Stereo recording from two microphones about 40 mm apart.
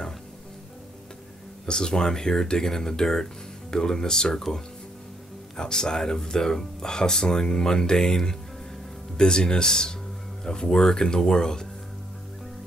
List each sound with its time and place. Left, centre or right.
1.7 s speech: centre
5.6 s speech: centre